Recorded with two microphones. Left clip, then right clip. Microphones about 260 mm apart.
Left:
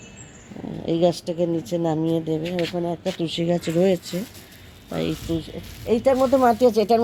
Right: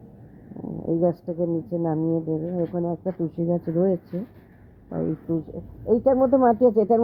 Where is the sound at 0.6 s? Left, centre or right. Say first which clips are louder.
Left 2 dB; centre.